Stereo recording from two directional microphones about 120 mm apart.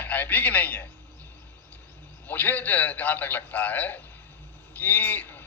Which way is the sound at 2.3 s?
15° left (ahead or behind).